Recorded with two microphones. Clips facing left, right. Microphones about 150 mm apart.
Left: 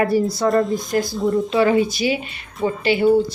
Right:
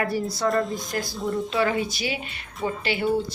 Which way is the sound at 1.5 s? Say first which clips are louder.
Left 6 dB; 20° left (ahead or behind).